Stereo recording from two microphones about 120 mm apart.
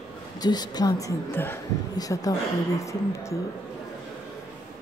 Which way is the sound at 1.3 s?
20° left (ahead or behind).